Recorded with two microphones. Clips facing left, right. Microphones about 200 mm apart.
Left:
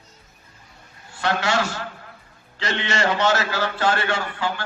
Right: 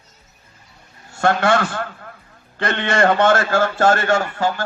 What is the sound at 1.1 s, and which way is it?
A man's voice, 50° right (ahead or behind).